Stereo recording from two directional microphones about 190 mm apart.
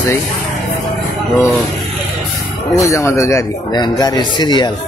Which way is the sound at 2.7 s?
15° left (ahead or behind).